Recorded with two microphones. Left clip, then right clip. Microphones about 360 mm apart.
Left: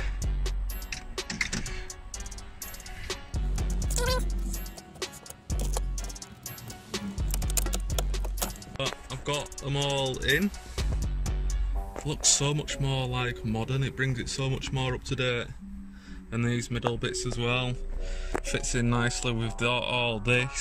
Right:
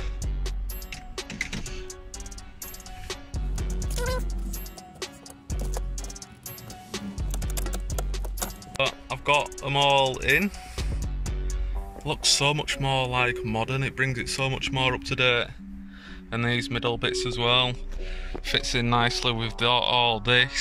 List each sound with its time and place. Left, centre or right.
0.0 s music: centre
2.1 s music: centre
12.1 s speech: centre